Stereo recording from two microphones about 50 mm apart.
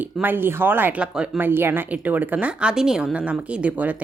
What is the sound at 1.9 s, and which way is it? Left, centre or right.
Speech, right.